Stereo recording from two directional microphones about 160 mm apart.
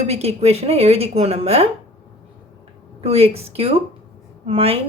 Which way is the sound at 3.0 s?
40° right (ahead or behind).